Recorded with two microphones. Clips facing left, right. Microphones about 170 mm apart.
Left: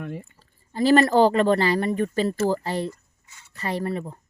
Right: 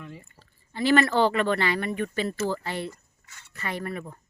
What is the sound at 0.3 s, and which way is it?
A woman's voice, 40° left (ahead or behind).